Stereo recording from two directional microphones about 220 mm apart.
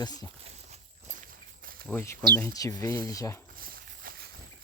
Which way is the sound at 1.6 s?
40° right (ahead or behind).